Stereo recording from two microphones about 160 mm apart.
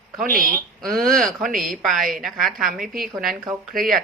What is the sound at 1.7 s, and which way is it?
Speech, centre (ahead or behind).